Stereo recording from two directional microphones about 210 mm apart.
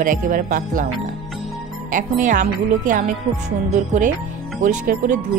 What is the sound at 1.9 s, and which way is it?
A woman's voice, 40° right (ahead or behind).